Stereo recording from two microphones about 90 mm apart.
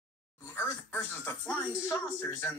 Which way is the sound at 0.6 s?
25° left (ahead or behind).